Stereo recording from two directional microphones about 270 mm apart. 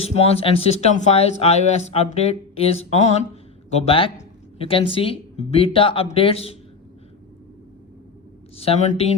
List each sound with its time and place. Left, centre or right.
0.0 s speech: left
8.5 s speech: left